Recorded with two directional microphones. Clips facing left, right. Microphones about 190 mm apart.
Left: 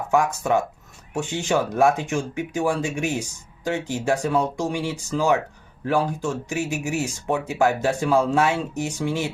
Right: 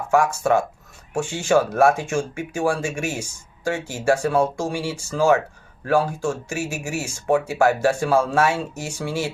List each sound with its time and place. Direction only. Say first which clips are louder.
0.1 s speech: right 2 dB; 15° left (ahead or behind)